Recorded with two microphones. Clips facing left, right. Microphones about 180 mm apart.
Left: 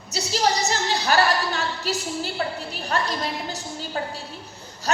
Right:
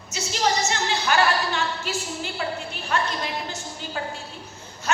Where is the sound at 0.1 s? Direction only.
35° left (ahead or behind).